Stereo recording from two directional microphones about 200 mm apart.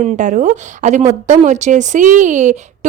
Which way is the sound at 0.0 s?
35° right (ahead or behind).